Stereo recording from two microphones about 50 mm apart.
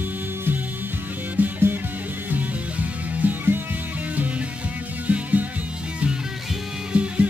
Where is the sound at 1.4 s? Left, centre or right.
Right.